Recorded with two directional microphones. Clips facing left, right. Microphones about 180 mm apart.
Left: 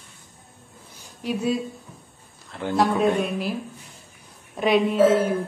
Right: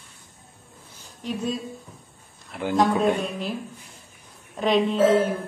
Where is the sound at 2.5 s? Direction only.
10° right (ahead or behind).